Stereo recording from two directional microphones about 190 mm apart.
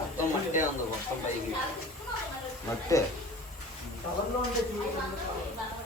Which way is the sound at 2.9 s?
15° left (ahead or behind).